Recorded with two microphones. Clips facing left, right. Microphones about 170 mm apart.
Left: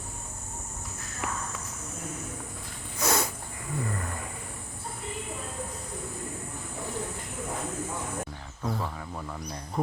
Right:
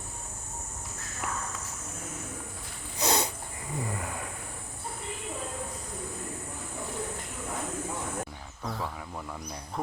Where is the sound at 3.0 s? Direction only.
25° right (ahead or behind).